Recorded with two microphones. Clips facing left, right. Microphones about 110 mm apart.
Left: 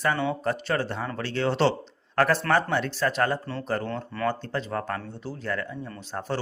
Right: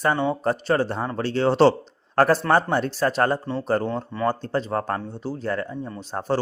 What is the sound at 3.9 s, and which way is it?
Speech, 15° right (ahead or behind).